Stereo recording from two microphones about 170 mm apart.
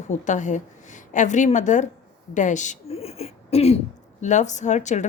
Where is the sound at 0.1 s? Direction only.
45° left (ahead or behind).